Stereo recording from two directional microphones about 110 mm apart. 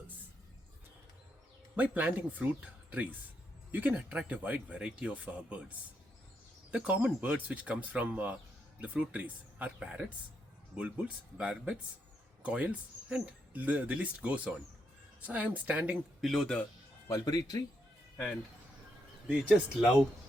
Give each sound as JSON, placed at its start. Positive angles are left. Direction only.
{"t": 1.7, "sound": "speech", "side_deg": -15}
{"t": 16.2, "sound": "speech", "side_deg": 0}
{"t": 17.1, "sound": "speech", "side_deg": 35}
{"t": 19.5, "sound": "speech", "side_deg": -10}